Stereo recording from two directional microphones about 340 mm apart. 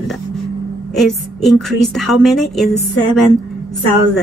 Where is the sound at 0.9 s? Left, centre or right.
Centre.